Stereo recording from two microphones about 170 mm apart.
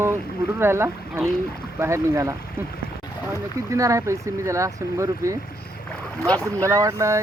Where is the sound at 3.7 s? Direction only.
20° right (ahead or behind).